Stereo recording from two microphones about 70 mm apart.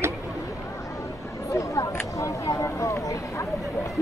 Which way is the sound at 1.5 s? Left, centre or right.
Left.